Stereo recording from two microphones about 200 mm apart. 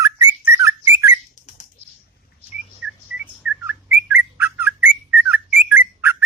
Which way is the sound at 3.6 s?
10° right (ahead or behind).